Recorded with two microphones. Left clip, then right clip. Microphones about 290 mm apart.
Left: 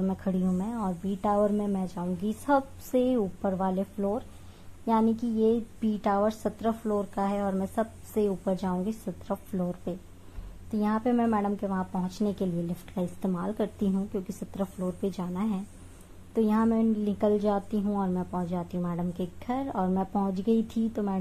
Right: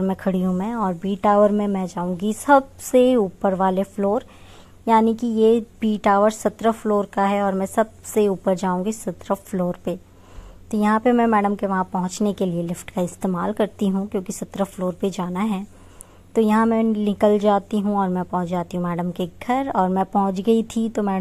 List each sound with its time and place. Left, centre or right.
0.0 s a woman's voice: right